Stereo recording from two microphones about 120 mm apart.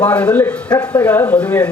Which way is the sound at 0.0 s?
10° left (ahead or behind).